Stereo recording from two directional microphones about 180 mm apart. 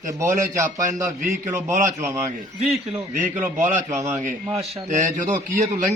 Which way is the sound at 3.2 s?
40° right (ahead or behind).